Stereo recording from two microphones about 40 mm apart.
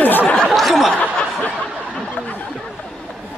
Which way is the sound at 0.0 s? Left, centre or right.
Left.